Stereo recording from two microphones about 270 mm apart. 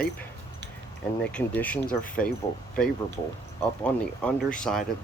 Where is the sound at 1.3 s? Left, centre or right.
Centre.